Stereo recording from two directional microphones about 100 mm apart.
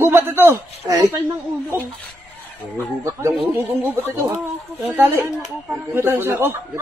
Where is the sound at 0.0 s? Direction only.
25° right (ahead or behind).